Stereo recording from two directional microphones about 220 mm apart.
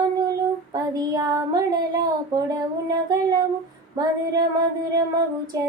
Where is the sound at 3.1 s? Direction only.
20° right (ahead or behind).